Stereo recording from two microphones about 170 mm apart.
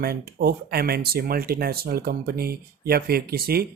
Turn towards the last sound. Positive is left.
turn(degrees=-65)  # may be behind; listen again after turning